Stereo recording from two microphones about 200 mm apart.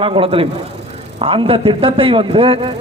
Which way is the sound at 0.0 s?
25° right (ahead or behind).